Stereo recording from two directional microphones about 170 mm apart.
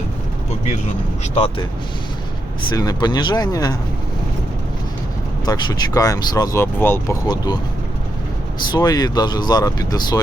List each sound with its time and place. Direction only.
1.2 s speech: 35° left (ahead or behind)
5.5 s speech: 25° left (ahead or behind)
7.3 s speech: 25° left (ahead or behind)
8.7 s speech: 20° left (ahead or behind)